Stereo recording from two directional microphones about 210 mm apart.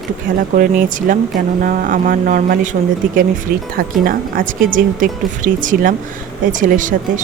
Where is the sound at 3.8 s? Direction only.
40° right (ahead or behind).